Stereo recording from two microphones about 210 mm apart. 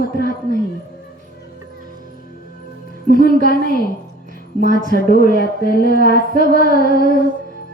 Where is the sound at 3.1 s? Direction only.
45° left (ahead or behind).